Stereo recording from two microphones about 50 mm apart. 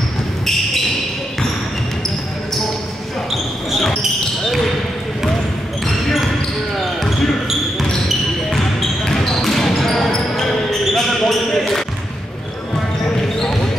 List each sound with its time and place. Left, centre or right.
3.7 s basketball bounce: centre
6.8 s basketball bounce: centre
9.0 s basketball bounce: centre